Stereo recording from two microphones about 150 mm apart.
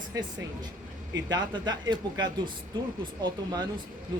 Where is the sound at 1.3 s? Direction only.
25° right (ahead or behind).